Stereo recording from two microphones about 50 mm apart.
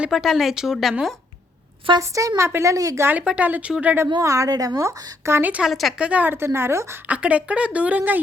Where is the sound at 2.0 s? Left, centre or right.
Right.